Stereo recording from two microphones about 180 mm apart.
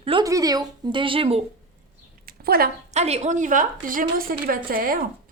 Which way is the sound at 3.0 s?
40° right (ahead or behind).